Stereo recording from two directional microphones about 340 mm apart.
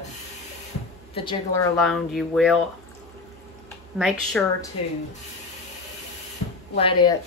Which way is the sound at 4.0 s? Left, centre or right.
Centre.